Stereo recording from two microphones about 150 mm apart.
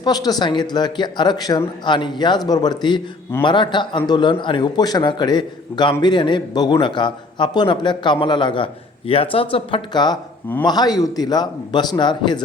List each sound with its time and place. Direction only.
0.0 s a man's voice: 25° left (ahead or behind)